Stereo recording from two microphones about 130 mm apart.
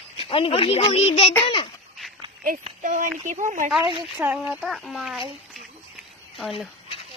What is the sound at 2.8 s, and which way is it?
Speech, 85° right.